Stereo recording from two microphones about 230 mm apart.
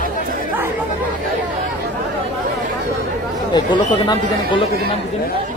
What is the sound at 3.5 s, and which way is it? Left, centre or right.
Speech, centre.